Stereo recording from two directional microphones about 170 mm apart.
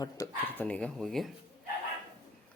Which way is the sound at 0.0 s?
15° left (ahead or behind).